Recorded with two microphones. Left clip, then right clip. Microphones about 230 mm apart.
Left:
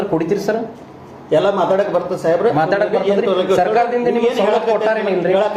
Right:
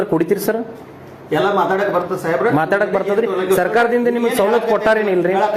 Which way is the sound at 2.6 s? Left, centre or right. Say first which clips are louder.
Left 1 dB; right.